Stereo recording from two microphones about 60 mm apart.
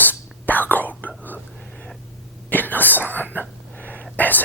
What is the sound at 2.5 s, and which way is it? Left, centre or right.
Whispering, left.